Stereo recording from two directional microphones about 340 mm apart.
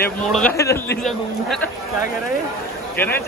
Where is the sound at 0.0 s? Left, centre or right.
Centre.